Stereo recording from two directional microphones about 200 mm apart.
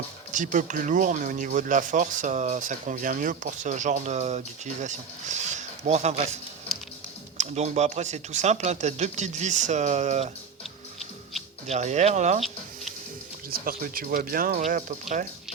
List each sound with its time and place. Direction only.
0.3 s speech: 40° right (ahead or behind)
11.7 s speech: 35° right (ahead or behind)
13.5 s speech: 45° right (ahead or behind)